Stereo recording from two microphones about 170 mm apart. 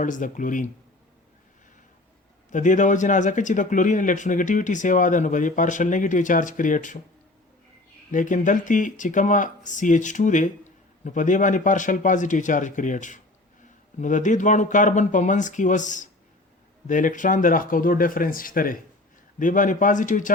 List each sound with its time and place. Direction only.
0.0 s speech: 50° left (ahead or behind)
2.5 s speech: 45° left (ahead or behind)
8.1 s speech: 50° left (ahead or behind)